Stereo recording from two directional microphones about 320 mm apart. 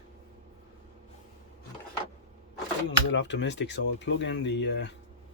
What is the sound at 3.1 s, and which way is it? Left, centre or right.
Speech, left.